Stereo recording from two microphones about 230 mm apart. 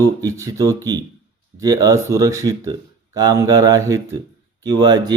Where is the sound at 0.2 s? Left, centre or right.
Centre.